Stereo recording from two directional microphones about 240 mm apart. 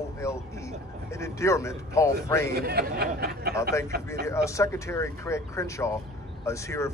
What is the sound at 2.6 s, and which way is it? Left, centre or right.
Speech, right.